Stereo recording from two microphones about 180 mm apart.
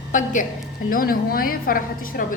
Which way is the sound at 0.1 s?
45° left (ahead or behind).